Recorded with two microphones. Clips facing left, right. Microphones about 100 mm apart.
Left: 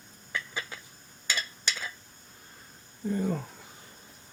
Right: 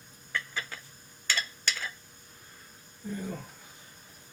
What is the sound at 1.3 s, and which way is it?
Stir, 15° left (ahead or behind).